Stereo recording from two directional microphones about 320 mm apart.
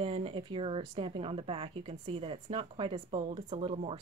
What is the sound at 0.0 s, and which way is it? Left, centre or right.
A woman's voice, centre.